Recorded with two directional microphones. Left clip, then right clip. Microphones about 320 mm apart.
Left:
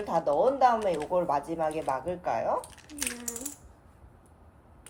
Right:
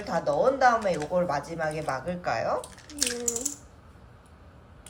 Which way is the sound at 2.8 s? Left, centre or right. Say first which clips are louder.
Right 6 dB; left.